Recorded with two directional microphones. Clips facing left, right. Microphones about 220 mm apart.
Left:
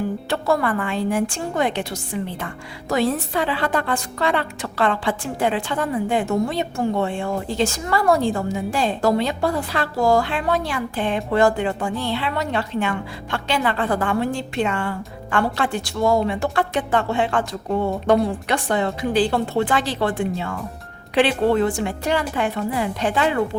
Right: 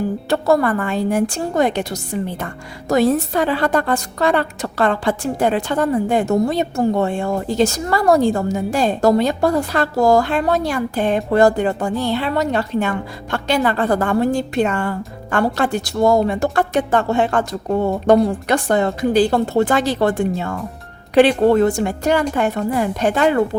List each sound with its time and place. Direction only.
0.3 s a woman's voice: 40° right (ahead or behind)